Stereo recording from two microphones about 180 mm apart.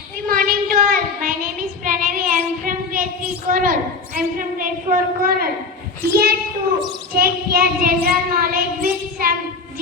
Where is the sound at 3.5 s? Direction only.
50° right (ahead or behind).